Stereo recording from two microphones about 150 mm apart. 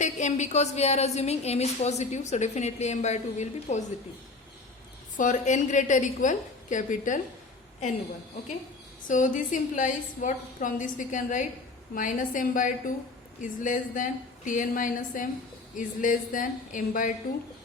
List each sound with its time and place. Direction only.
0.0 s a woman's voice: 50° left (ahead or behind)
5.1 s a woman's voice: 55° left (ahead or behind)
9.0 s a woman's voice: 60° left (ahead or behind)